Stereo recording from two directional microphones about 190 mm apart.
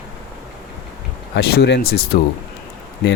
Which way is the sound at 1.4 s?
55° left (ahead or behind).